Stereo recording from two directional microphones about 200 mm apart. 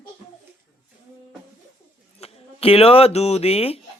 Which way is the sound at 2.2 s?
30° left (ahead or behind).